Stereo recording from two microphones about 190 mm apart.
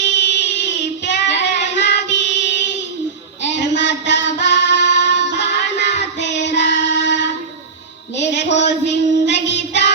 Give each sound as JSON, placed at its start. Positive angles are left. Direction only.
{"t": 0.0, "sound": "child singing", "side_deg": 70}
{"t": 1.5, "sound": "female singing", "side_deg": 65}
{"t": 3.4, "sound": "child singing", "side_deg": 70}
{"t": 6.7, "sound": "female singing", "side_deg": 65}
{"t": 8.1, "sound": "music", "side_deg": 70}
{"t": 8.5, "sound": "child singing", "side_deg": 65}